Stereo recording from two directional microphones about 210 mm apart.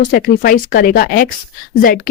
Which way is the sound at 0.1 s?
40° left (ahead or behind).